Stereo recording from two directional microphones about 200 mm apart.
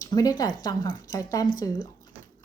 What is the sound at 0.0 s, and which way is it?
Speech, 20° left (ahead or behind).